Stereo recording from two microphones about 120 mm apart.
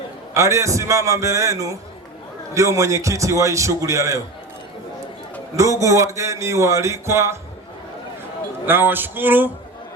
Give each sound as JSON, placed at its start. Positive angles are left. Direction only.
{"t": 0.3, "sound": "a man's voice", "side_deg": -25}
{"t": 5.5, "sound": "a man's voice", "side_deg": -25}
{"t": 8.6, "sound": "a man's voice", "side_deg": -15}